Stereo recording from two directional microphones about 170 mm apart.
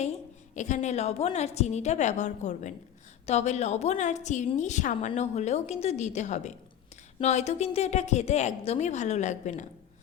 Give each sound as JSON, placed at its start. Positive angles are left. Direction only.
{"t": 0.5, "sound": "a woman's voice", "side_deg": 45}